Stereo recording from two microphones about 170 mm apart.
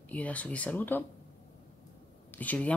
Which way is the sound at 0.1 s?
10° left (ahead or behind).